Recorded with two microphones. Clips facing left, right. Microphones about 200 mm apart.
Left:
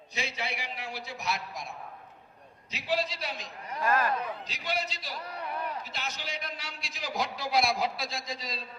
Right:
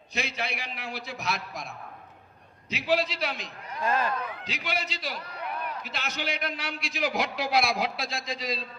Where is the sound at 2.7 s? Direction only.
80° right.